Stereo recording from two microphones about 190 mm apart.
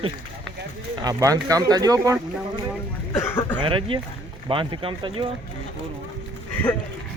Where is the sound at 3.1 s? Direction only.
15° left (ahead or behind).